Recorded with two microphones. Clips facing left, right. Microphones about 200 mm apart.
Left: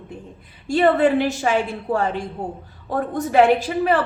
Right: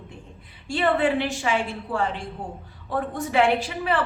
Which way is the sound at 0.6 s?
40° left (ahead or behind).